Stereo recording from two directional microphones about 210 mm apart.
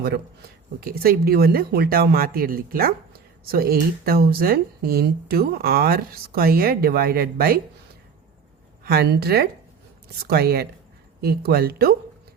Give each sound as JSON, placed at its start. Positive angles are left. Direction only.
{"t": 0.8, "sound": "speech", "side_deg": -45}
{"t": 8.8, "sound": "speech", "side_deg": -50}